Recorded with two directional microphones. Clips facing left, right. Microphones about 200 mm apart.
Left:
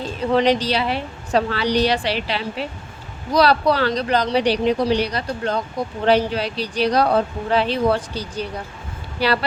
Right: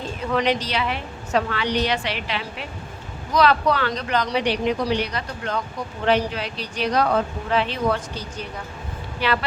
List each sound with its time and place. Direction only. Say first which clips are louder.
0.3 s speech: left 5 dB; 30° left (ahead or behind)